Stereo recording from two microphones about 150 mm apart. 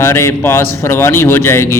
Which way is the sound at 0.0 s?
20° left (ahead or behind).